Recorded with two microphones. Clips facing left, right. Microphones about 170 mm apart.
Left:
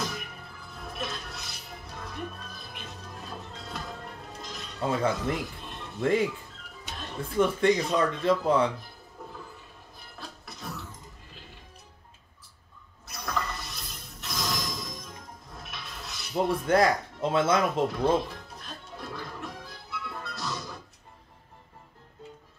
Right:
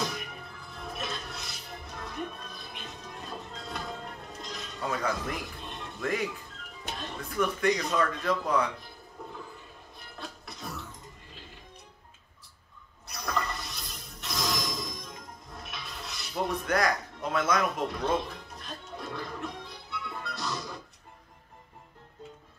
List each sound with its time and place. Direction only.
0.0 s music: centre (ahead or behind)
4.7 s speech: 25° left (ahead or behind)
5.6 s a sound: centre (ahead or behind)
5.9 s speech: 25° left (ahead or behind)
9.2 s toilet flush: centre (ahead or behind)
10.1 s a sound: centre (ahead or behind)
13.0 s toilet flush: centre (ahead or behind)
16.6 s speech: 25° left (ahead or behind)
18.6 s music: centre (ahead or behind)